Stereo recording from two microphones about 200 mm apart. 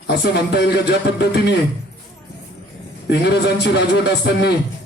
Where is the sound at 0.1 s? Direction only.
55° left (ahead or behind).